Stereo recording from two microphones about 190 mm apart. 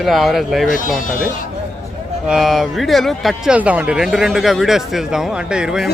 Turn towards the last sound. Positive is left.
turn(degrees=-5)  # may be behind; listen again after turning